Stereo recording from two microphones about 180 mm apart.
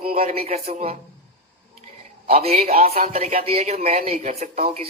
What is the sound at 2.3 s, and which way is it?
Speech, 35° right (ahead or behind).